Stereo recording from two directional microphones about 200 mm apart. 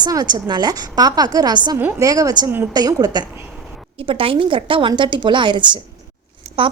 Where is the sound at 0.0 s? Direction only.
20° right (ahead or behind).